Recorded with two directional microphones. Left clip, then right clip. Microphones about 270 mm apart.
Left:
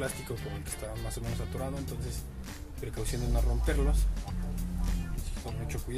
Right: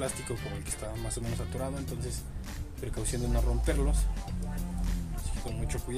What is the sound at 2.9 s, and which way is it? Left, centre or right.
Speech, centre.